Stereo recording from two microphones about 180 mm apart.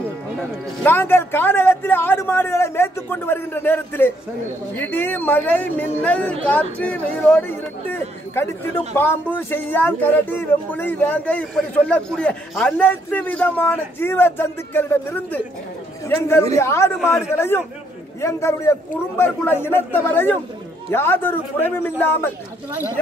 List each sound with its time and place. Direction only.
0.4 s speech: 10° left (ahead or behind)